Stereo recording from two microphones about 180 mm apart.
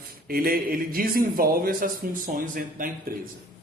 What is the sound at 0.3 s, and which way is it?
Speech, 55° right (ahead or behind).